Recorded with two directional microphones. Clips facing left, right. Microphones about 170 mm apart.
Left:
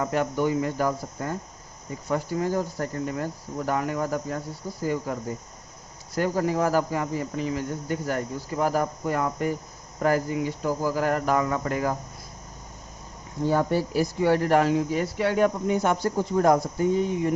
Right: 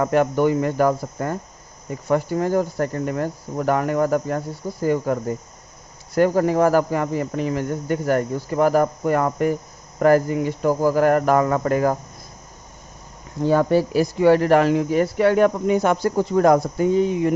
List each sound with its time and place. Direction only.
0.0 s speech: 60° right (ahead or behind)
13.4 s speech: 90° right